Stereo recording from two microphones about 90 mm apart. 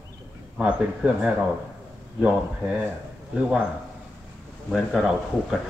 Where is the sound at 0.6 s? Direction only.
15° right (ahead or behind).